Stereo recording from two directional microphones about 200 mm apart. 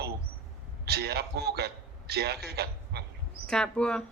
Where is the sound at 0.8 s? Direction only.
55° right (ahead or behind).